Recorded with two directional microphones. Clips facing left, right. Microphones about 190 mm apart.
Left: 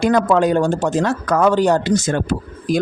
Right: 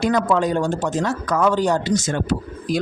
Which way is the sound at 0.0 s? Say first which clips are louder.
Left 4 dB; 55° left (ahead or behind).